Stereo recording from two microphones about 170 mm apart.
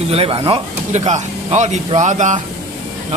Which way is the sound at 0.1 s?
35° right (ahead or behind).